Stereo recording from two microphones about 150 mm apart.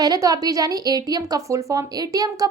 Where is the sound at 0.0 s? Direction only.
25° right (ahead or behind).